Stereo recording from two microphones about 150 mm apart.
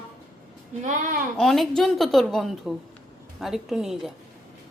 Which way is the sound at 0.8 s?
60° right (ahead or behind).